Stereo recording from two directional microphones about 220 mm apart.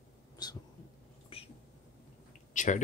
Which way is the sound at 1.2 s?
25° left (ahead or behind).